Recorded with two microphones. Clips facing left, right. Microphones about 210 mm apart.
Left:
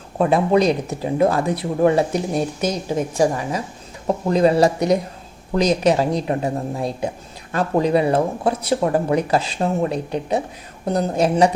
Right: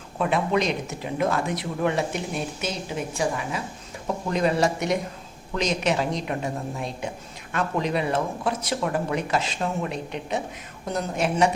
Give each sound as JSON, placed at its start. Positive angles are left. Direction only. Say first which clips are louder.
{"t": 0.2, "sound": "speech", "louder": "left 7 dB", "side_deg": 35}